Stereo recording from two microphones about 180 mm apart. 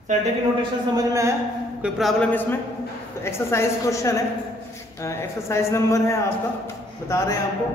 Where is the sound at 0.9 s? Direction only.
15° right (ahead or behind).